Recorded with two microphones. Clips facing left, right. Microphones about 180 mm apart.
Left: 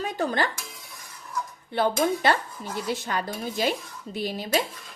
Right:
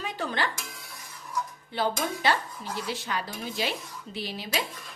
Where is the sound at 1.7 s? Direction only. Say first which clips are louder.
Left 5 dB; 55° left (ahead or behind).